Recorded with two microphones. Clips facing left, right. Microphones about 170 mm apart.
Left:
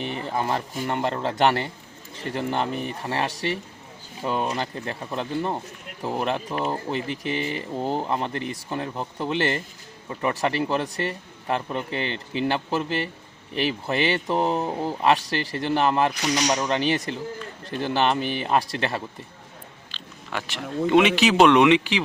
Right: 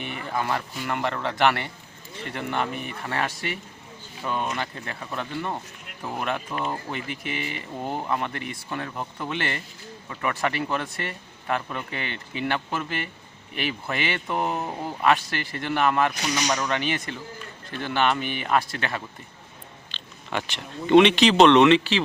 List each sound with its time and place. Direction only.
0.0 s speech: 30° left (ahead or behind)
19.9 s speech: centre (ahead or behind)